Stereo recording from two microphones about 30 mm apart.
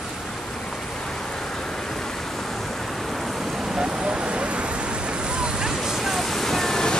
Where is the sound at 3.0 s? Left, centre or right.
Centre; by 4.2 s right.